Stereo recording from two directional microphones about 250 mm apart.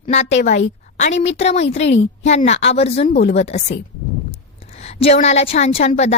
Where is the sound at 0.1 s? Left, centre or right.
Left.